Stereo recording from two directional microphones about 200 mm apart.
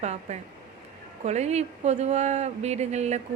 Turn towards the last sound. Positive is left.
turn(degrees=-35)  # may be behind; listen again after turning